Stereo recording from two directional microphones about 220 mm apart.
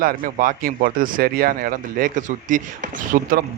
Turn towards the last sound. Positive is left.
turn(degrees=-40)  # may be behind; listen again after turning